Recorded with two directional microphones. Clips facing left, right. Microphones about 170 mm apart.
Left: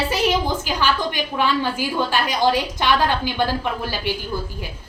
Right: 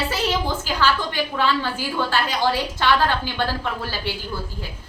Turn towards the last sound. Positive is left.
turn(degrees=15)  # may be behind; listen again after turning